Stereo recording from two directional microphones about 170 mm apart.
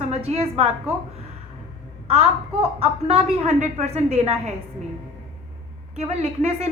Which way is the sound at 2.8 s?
40° right (ahead or behind).